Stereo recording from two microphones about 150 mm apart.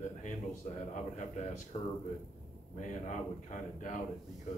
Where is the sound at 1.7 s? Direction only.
40° left (ahead or behind).